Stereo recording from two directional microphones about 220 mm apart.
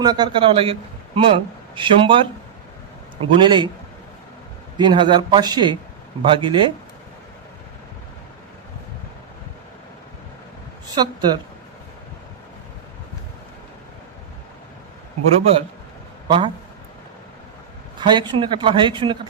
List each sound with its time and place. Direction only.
0.0 s speech: 20° right (ahead or behind)
4.8 s speech: 20° right (ahead or behind)
10.9 s speech: 20° right (ahead or behind)
15.4 s speech: 25° right (ahead or behind)
18.0 s speech: 20° right (ahead or behind)